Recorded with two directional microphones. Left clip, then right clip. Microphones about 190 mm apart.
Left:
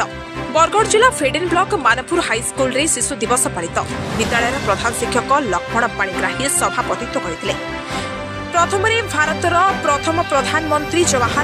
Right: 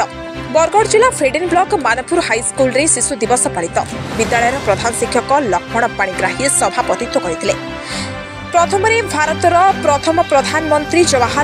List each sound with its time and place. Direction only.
0.6 s speech: 10° right (ahead or behind)
8.5 s speech: 15° right (ahead or behind)